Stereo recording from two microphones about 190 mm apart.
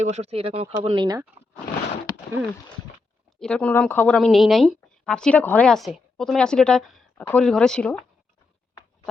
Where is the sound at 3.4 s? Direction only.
5° left (ahead or behind).